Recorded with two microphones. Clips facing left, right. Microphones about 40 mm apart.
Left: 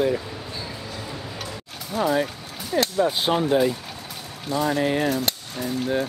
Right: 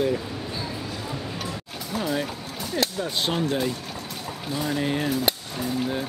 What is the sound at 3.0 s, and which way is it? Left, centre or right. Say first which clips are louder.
Speech: left 5 dB; centre.